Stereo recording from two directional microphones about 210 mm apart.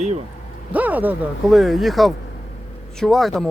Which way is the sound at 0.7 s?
10° right (ahead or behind).